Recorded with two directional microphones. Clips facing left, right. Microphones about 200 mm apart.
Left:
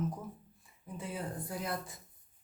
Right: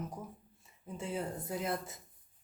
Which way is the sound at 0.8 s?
25° right (ahead or behind).